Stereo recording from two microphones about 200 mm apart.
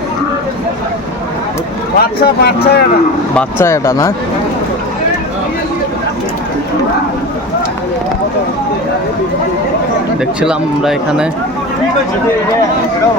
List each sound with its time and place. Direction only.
2.0 s speech: 50° left (ahead or behind)
3.3 s speech: 15° left (ahead or behind)
10.4 s a man's voice: 5° right (ahead or behind)